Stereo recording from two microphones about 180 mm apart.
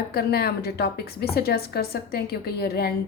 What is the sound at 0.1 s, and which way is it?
A woman's voice, 60° left (ahead or behind).